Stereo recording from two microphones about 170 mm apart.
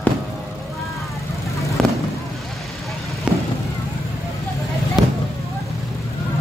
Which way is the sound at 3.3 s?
5° right (ahead or behind).